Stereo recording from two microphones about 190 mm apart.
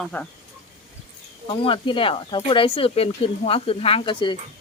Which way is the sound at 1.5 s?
25° left (ahead or behind).